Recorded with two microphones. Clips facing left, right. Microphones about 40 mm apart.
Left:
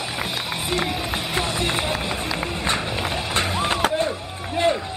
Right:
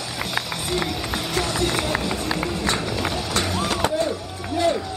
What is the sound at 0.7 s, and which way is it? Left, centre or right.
Run, left.